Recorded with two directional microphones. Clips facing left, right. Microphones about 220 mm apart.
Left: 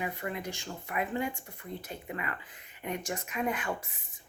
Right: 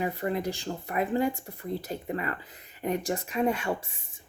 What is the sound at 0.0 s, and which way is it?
Speech, 35° right (ahead or behind).